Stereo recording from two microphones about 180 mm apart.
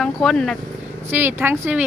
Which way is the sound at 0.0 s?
Centre (ahead or behind).